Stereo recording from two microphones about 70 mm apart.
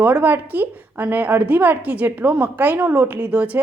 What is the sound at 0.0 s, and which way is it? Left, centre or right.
A woman's voice, right.